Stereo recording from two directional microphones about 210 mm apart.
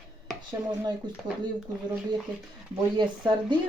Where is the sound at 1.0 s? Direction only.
20° right (ahead or behind).